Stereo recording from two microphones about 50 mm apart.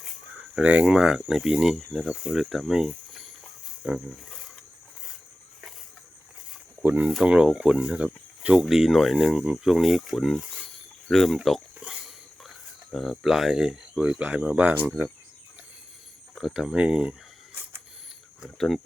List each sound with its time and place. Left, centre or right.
0.6 s speech: right
0.9 s speech: centre
1.2 s speech: centre
2.1 s speech: centre
4.3 s a sound: centre
7.2 s speech: centre
8.7 s speech: centre
11.4 s a sound: centre
13.2 s speech: centre
13.9 s speech: right
16.4 s speech: centre
16.7 s speech: centre
18.5 s speech: centre